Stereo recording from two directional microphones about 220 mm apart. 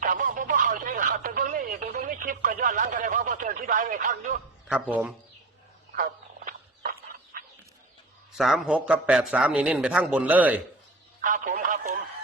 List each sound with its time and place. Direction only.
0.0 s telephone: 35° right (ahead or behind)
4.7 s a man's voice: 5° right (ahead or behind)
6.0 s a sound: 40° right (ahead or behind)
8.4 s a man's voice: centre (ahead or behind)
11.2 s speech: 40° right (ahead or behind)